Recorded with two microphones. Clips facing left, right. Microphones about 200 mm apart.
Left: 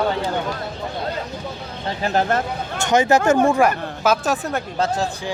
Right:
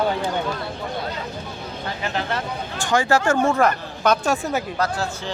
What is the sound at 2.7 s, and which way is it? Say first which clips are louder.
Speech: left 3 dB; 20° left (ahead or behind).